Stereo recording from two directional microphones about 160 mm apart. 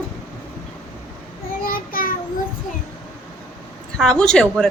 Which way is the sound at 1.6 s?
65° left (ahead or behind).